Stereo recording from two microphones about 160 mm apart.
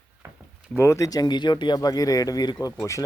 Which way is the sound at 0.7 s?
15° left (ahead or behind).